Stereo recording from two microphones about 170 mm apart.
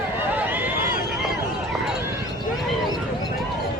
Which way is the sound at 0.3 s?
10° right (ahead or behind).